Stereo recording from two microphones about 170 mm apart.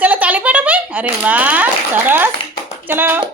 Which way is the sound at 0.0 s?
10° right (ahead or behind).